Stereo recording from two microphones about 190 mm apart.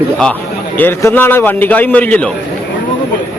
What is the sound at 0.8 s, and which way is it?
A man's voice, 10° left (ahead or behind).